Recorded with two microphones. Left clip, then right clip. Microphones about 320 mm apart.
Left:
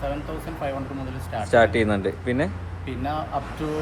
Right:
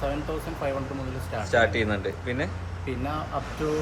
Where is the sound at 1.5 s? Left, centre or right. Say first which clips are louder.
Left 5 dB; left.